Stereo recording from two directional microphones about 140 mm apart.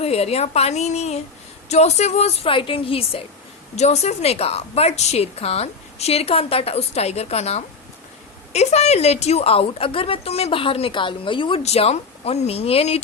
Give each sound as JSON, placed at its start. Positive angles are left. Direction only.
{"t": 0.0, "sound": "a woman's voice", "side_deg": 45}
{"t": 3.8, "sound": "a woman's voice", "side_deg": 50}